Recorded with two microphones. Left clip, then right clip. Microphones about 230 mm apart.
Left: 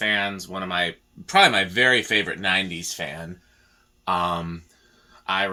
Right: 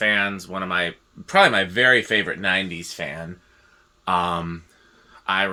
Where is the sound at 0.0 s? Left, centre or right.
Right.